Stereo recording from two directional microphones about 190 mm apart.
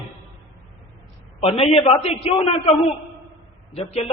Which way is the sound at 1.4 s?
30° left (ahead or behind).